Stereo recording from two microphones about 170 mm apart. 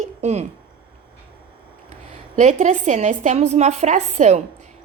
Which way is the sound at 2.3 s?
40° right (ahead or behind).